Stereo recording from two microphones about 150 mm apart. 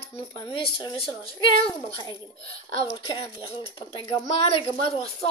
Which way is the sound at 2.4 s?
40° left (ahead or behind).